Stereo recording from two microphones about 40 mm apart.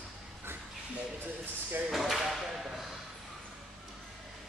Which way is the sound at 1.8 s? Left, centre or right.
Centre.